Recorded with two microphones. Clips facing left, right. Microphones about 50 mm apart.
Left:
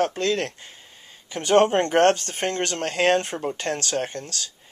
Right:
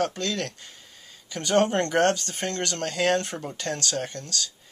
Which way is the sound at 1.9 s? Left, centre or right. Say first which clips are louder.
Left 4 dB; left.